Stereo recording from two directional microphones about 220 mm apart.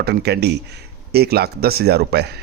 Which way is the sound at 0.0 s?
50° right (ahead or behind).